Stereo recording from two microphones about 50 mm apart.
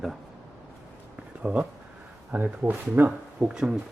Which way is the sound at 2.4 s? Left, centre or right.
Right.